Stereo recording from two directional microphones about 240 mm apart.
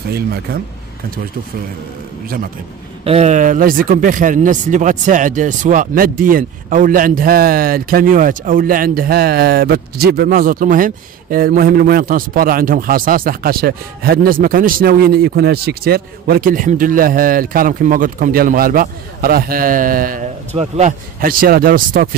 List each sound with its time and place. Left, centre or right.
0.1 s speech: right
2.2 s speech: right
3.0 s speech: right